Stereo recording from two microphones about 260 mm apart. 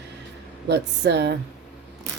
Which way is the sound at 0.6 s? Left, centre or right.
Right.